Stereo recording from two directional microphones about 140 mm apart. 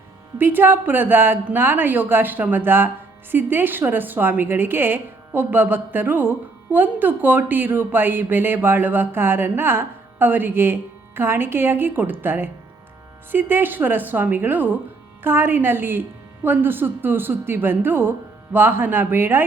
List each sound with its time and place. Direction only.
0.3 s a woman's voice: 15° right (ahead or behind)